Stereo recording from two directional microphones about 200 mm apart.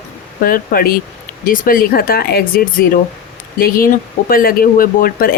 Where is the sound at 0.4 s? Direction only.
45° left (ahead or behind).